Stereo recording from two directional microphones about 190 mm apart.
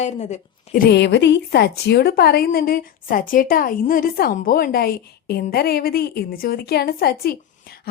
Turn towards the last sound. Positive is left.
turn(degrees=55)  # may be behind; listen again after turning